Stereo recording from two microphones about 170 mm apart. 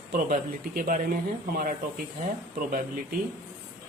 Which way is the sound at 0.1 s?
55° right (ahead or behind).